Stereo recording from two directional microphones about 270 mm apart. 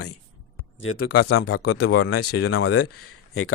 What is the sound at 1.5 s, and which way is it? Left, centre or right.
Speech, left.